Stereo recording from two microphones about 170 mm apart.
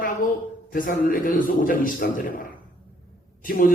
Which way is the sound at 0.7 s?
55° left (ahead or behind).